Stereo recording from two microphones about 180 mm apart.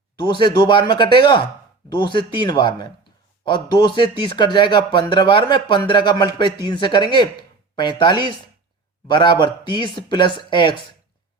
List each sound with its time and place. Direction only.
0.2 s speech: 25° left (ahead or behind)